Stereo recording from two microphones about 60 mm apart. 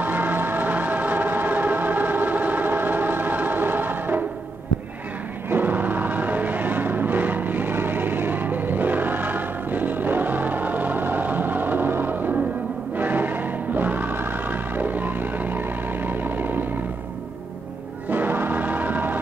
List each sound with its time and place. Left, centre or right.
0.0 s music: right
5.5 s music: right
12.9 s choir: right
18.1 s music: right